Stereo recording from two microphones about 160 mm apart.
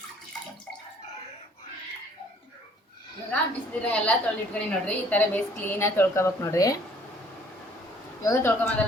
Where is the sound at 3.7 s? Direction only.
10° left (ahead or behind).